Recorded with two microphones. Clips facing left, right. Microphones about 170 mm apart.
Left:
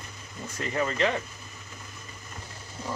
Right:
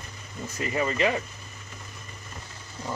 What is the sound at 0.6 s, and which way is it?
Speech, 5° right (ahead or behind).